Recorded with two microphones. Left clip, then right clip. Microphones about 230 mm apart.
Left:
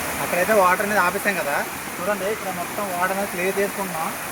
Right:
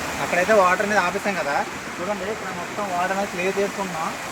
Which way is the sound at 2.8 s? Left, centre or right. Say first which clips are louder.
Right 1 dB; centre.